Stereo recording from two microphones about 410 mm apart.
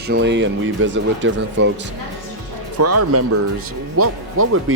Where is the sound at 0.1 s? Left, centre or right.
Right.